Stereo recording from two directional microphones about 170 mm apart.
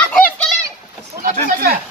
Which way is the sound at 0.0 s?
5° left (ahead or behind).